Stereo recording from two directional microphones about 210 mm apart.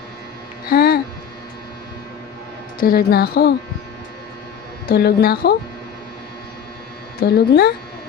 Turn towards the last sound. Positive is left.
turn(degrees=50)  # may be behind; listen again after turning